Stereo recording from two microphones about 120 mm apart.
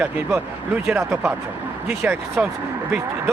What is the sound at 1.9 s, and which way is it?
Speech, 20° right (ahead or behind).